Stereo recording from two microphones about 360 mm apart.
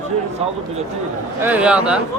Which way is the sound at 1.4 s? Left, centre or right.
Centre.